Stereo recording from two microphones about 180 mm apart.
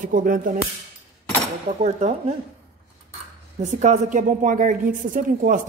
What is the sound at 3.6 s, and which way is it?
A woman's voice, 40° right (ahead or behind).